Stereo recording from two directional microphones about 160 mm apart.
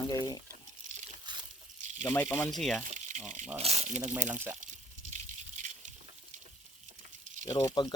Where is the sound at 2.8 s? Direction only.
50° right (ahead or behind).